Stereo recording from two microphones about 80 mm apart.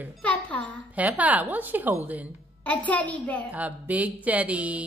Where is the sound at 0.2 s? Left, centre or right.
Centre.